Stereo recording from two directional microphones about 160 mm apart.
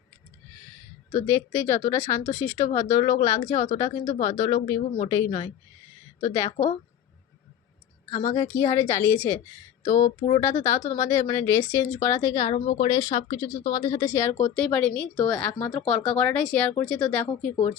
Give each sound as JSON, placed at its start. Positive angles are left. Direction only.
{"t": 1.1, "sound": "speech", "side_deg": 15}
{"t": 8.1, "sound": "speech", "side_deg": 20}